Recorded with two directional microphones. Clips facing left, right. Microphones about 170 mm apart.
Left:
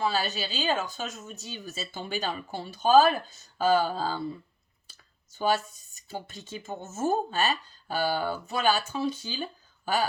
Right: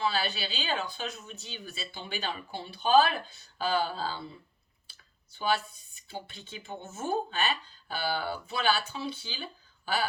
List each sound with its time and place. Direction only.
0.0 s speech: 45° left (ahead or behind)